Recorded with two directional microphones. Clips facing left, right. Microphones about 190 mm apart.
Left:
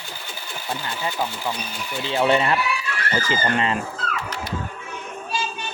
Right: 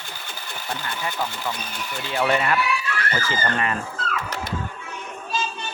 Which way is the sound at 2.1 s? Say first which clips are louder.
Left 3 dB; 25° left (ahead or behind).